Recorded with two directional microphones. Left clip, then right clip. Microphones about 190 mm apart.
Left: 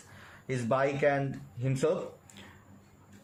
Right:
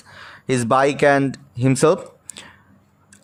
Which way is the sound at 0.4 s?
45° right (ahead or behind).